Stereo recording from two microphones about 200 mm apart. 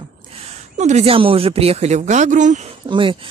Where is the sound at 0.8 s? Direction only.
35° right (ahead or behind).